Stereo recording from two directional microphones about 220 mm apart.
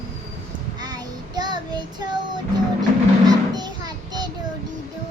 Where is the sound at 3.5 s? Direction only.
20° right (ahead or behind).